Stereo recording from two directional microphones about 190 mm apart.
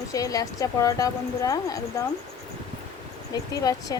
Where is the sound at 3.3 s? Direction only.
20° left (ahead or behind).